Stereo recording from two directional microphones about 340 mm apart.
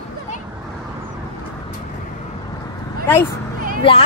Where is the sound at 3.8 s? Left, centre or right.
Centre.